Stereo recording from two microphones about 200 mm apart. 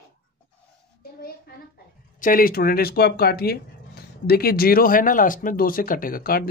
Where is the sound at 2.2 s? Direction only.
45° left (ahead or behind).